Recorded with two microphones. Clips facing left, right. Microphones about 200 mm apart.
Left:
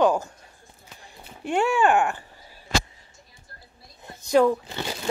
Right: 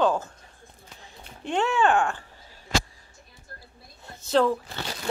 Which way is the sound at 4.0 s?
15° left (ahead or behind).